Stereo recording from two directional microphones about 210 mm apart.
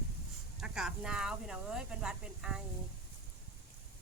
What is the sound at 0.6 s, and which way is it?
Speech, 5° right (ahead or behind).